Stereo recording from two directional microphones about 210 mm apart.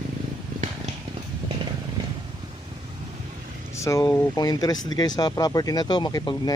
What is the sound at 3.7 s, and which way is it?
Speech, 15° left (ahead or behind).